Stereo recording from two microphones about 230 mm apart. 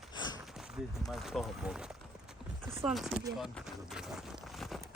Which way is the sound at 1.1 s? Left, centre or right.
Centre.